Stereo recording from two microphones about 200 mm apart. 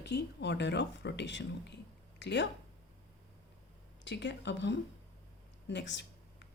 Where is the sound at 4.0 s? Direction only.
60° left (ahead or behind).